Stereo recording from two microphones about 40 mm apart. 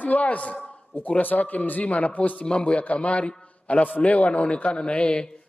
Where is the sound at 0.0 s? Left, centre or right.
Left.